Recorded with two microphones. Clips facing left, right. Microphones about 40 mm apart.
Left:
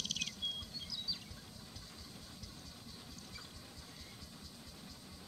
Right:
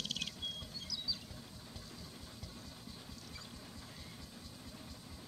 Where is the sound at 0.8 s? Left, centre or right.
Centre.